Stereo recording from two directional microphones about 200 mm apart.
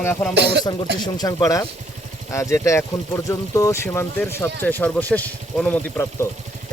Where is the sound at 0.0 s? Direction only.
10° left (ahead or behind).